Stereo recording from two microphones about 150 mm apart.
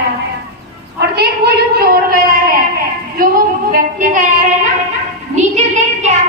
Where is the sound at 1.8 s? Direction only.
80° right.